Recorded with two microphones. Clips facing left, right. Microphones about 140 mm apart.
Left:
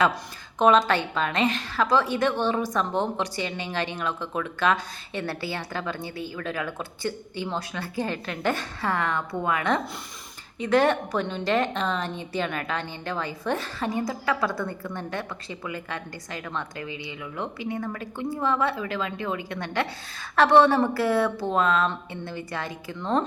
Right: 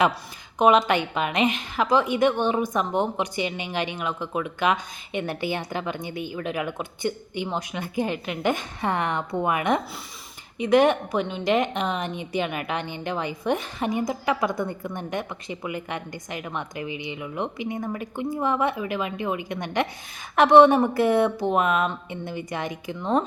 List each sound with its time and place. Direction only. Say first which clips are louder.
0.6 s a woman's voice: right 1 dB; 15° right (ahead or behind)